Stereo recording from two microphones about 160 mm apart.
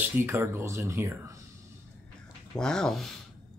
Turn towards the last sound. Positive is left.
turn(degrees=0)  # may be behind; listen again after turning